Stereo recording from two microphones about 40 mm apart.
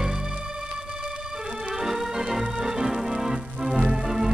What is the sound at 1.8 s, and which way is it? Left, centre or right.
Organ, centre.